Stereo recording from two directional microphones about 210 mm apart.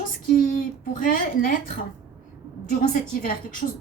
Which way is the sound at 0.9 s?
40° left (ahead or behind).